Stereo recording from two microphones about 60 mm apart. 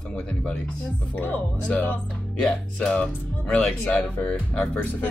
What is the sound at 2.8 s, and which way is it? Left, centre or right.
Speech, centre.